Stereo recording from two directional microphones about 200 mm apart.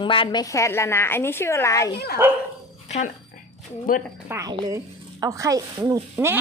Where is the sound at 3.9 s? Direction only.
45° left (ahead or behind).